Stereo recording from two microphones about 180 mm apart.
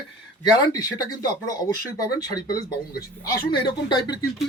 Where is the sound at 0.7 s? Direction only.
20° left (ahead or behind).